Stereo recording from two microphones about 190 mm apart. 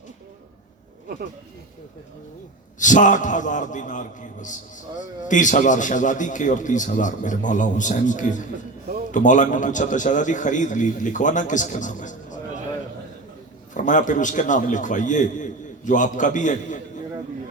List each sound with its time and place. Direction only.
2.7 s a man's voice: 40° left (ahead or behind)
13.7 s a man's voice: 40° left (ahead or behind)